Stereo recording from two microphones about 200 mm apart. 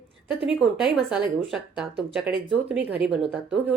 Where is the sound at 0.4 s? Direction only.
5° right (ahead or behind).